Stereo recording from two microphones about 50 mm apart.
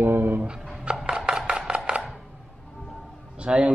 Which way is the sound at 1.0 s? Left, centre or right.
Centre.